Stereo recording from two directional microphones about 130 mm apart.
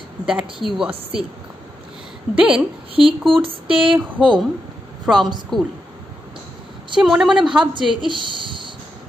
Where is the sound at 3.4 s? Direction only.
45° right (ahead or behind).